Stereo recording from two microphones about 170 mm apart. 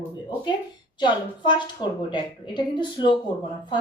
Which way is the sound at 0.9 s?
25° left (ahead or behind).